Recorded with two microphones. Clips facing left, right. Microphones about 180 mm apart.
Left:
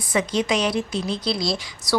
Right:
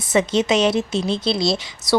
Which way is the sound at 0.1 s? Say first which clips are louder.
Right 4 dB; 25° right (ahead or behind).